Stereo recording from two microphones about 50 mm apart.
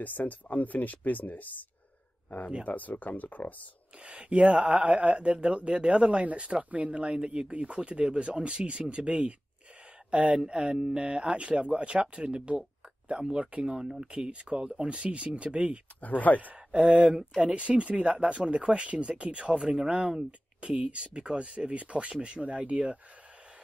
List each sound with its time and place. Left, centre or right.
0.0 s speech: left
2.6 s speech: left
4.0 s speech: right
16.0 s speech: left
16.3 s speech: right